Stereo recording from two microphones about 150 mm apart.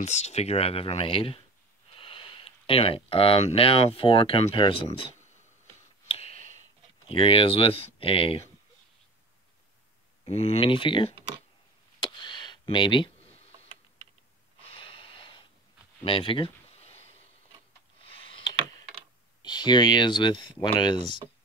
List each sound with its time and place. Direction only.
0.0 s speech: 45° left (ahead or behind)
6.0 s clicking: 40° left (ahead or behind)
7.1 s speech: 35° left (ahead or behind)
10.2 s speech: 40° left (ahead or behind)
12.0 s a sound: 30° left (ahead or behind)
14.6 s snort: 35° left (ahead or behind)
16.0 s a sound: 35° left (ahead or behind)
19.4 s speech: 30° left (ahead or behind)